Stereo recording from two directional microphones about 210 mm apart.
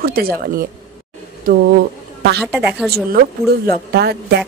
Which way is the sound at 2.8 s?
50° right (ahead or behind).